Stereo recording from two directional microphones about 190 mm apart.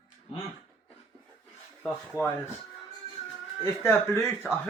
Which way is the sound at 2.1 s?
20° left (ahead or behind).